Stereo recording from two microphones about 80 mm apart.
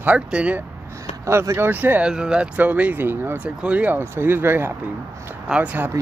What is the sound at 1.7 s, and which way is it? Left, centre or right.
Speech, right.